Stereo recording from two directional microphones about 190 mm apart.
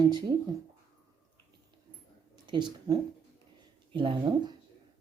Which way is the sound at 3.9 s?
25° right (ahead or behind).